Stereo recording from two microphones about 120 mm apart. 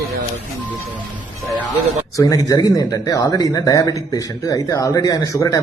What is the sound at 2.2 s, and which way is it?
Speech, 30° left (ahead or behind).